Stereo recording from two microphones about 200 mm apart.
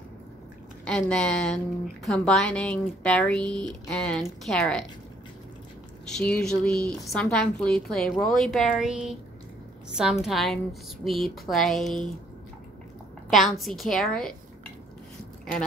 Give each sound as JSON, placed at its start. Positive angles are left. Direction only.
{"t": 0.8, "sound": "speech", "side_deg": 5}
{"t": 6.0, "sound": "speech", "side_deg": 5}
{"t": 10.2, "sound": "speech", "side_deg": 0}
{"t": 13.3, "sound": "speech", "side_deg": 0}